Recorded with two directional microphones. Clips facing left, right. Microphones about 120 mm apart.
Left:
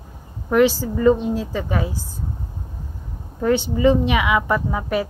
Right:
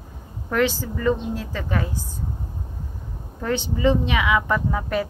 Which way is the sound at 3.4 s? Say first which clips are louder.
Left 5 dB; 10° left (ahead or behind).